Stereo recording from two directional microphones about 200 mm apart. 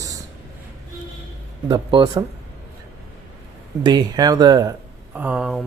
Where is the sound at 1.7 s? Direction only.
25° right (ahead or behind).